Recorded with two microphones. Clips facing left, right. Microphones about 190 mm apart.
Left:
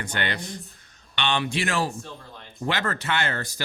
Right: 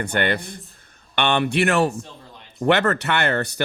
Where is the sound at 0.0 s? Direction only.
55° right (ahead or behind).